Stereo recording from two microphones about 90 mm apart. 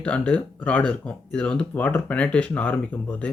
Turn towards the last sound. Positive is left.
turn(degrees=15)  # may be behind; listen again after turning